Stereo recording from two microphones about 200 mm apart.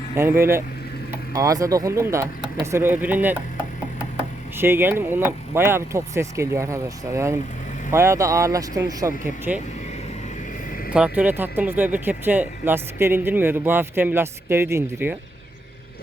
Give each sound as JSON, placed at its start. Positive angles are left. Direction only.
{"t": 0.2, "sound": "speech", "side_deg": -10}
{"t": 4.5, "sound": "speech", "side_deg": -10}
{"t": 10.9, "sound": "speech", "side_deg": -5}